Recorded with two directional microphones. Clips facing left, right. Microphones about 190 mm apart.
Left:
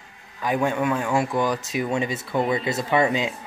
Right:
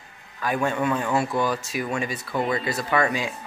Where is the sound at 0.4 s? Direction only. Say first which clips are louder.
Left 2 dB; 15° left (ahead or behind).